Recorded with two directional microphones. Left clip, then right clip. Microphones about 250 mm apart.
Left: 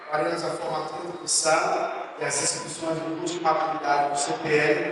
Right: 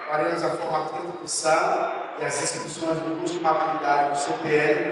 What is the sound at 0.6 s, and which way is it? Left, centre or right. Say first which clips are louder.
A man's voice: right 3 dB; centre.